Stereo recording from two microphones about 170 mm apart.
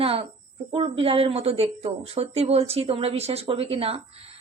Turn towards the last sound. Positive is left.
turn(degrees=-35)  # may be behind; listen again after turning